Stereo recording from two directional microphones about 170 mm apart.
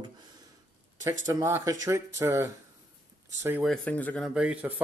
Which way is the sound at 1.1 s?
15° right (ahead or behind).